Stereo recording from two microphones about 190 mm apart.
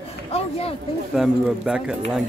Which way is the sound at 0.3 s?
30° left (ahead or behind).